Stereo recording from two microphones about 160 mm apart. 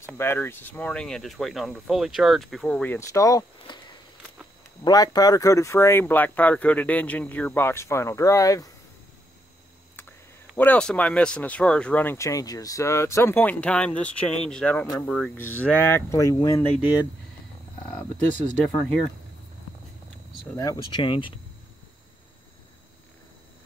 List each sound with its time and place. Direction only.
0.0 s speech: 15° left (ahead or behind)
4.8 s speech: 25° left (ahead or behind)
9.9 s speech: 10° left (ahead or behind)
20.5 s speech: 25° left (ahead or behind)